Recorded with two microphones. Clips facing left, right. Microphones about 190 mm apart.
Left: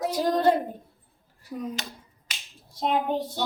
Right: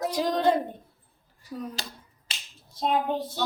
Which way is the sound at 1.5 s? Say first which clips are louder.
Left 3 dB; 15° left (ahead or behind).